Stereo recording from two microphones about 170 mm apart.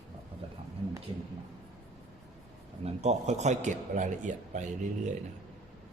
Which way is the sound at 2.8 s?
40° right (ahead or behind).